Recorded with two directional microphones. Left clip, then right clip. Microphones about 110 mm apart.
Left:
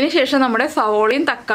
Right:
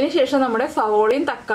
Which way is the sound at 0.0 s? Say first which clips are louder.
Left 2 dB; 35° left (ahead or behind).